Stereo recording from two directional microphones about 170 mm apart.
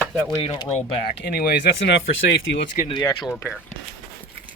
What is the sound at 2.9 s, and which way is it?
Speech, 25° left (ahead or behind).